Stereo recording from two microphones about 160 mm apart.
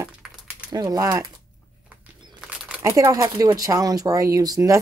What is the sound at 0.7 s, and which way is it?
Speech, 25° right (ahead or behind).